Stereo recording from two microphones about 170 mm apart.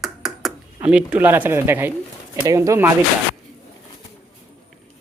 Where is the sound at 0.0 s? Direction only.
Centre (ahead or behind).